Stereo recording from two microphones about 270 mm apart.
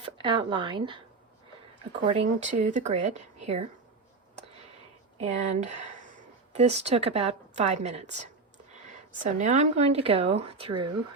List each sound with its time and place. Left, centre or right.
0.0 s speech: centre
2.0 s speech: right
5.2 s speech: right
9.4 s speech: right